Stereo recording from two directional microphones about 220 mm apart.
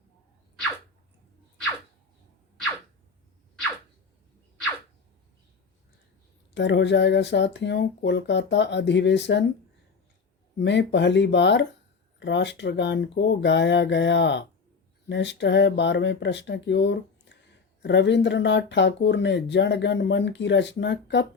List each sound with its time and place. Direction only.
6.5 s speech: 55° left (ahead or behind)
10.6 s speech: 50° left (ahead or behind)